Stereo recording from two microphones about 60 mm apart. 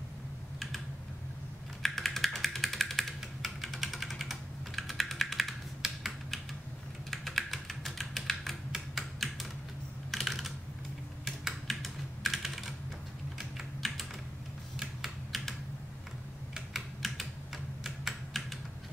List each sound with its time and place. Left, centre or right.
1.8 s a sound: centre
7.1 s typing: centre
11.2 s computer keyboard: centre
13.4 s typing: centre
16.5 s typing: centre